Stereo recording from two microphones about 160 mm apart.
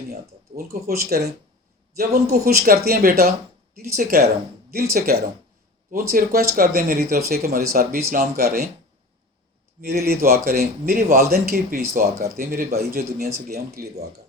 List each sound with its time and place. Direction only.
0.1 s speech: 65° right (ahead or behind)
9.8 s speech: 75° right (ahead or behind)